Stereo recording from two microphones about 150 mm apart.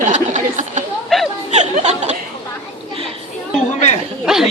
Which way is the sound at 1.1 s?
Centre (ahead or behind).